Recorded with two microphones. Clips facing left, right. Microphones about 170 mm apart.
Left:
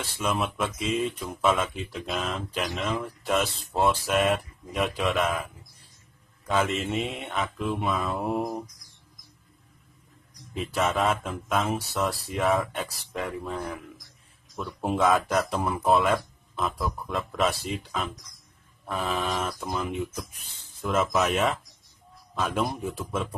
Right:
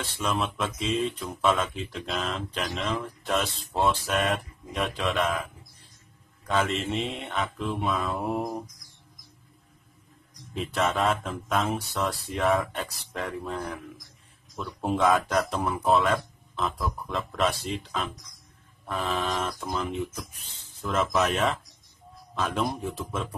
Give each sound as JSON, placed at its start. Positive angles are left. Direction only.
{"t": 0.2, "sound": "speech", "side_deg": 5}
{"t": 10.5, "sound": "speech", "side_deg": 0}